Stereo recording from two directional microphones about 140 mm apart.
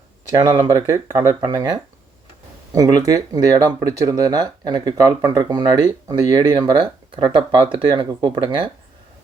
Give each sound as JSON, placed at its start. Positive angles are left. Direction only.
{"t": 0.3, "sound": "speech", "side_deg": -30}